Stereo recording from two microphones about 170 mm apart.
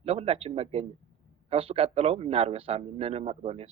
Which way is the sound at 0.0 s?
35° right (ahead or behind).